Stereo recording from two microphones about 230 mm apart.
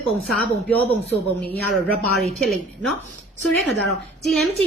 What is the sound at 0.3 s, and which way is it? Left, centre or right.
Speech, centre.